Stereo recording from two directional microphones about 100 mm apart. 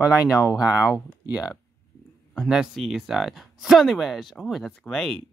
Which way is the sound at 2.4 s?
5° right (ahead or behind).